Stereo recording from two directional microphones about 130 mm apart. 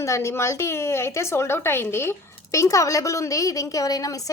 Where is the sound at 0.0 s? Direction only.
20° left (ahead or behind).